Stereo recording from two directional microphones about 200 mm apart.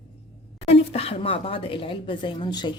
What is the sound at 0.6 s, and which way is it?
Speech, 30° left (ahead or behind).